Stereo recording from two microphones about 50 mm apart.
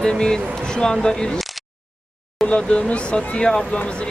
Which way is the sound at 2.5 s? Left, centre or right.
Left.